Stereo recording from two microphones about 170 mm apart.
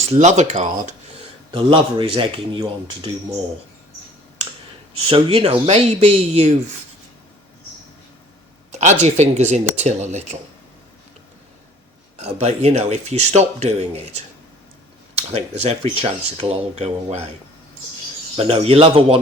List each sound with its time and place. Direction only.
0.1 s speech: 45° right (ahead or behind)
1.5 s speech: 30° right (ahead or behind)
5.0 s speech: 35° right (ahead or behind)
8.8 s speech: 45° right (ahead or behind)
12.1 s speech: 40° right (ahead or behind)
15.1 s speech: 40° right (ahead or behind)
18.3 s speech: 35° right (ahead or behind)